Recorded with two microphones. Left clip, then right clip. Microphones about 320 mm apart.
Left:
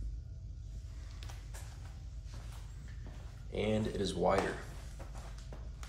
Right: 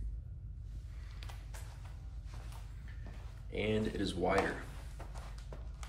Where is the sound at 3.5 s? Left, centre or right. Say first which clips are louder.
Even; centre.